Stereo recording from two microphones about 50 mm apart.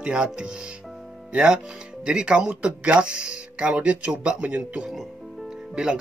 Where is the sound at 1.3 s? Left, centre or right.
Right.